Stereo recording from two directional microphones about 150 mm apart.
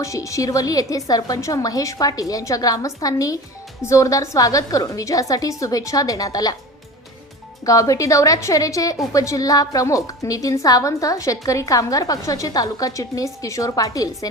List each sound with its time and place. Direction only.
0.0 s a woman's voice: 20° left (ahead or behind)
7.6 s a woman's voice: 20° left (ahead or behind)